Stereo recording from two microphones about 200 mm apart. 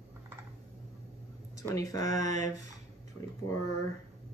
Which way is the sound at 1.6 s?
15° left (ahead or behind).